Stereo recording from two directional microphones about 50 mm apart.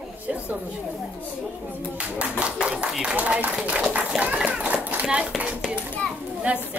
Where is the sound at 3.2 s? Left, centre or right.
Right.